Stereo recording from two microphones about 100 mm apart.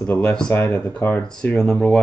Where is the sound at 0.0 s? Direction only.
15° left (ahead or behind).